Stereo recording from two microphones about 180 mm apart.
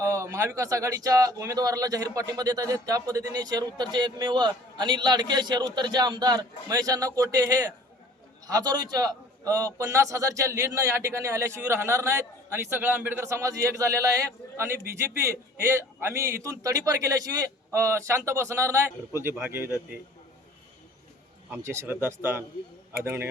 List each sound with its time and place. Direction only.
0.0 s a man's voice: 15° right (ahead or behind)
21.5 s a man's voice: 15° right (ahead or behind)